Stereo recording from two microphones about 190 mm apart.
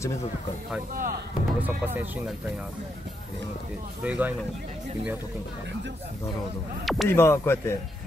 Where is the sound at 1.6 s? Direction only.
10° right (ahead or behind).